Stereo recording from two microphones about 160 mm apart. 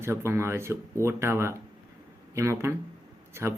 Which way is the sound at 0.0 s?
15° right (ahead or behind).